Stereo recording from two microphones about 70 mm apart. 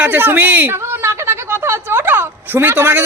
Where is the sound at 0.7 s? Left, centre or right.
Right.